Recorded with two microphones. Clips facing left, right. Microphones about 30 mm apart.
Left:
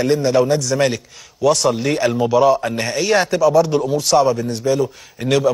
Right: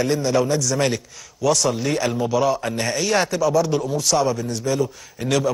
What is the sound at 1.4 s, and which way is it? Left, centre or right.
A man's voice, centre.